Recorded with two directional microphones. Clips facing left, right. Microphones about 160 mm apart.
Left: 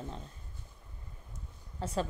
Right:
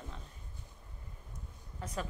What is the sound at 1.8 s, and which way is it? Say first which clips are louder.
Speech: left 6 dB; 30° left (ahead or behind).